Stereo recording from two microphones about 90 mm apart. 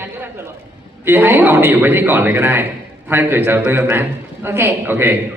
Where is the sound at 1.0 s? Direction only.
25° right (ahead or behind).